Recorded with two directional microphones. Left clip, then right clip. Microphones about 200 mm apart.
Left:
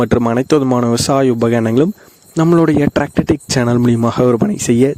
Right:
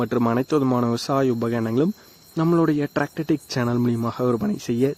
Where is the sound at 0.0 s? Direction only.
40° left (ahead or behind).